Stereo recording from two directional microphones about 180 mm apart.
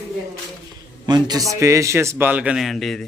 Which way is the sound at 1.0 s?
25° right (ahead or behind).